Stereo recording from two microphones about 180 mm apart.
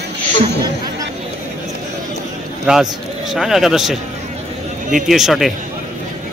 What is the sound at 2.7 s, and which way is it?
A man's voice, centre (ahead or behind).